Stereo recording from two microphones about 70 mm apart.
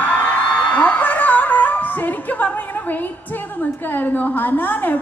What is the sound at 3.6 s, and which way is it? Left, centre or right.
A woman's voice, left.